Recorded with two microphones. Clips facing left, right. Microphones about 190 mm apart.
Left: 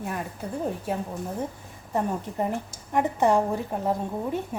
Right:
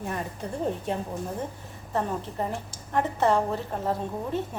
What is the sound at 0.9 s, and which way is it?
A woman's voice, 5° left (ahead or behind).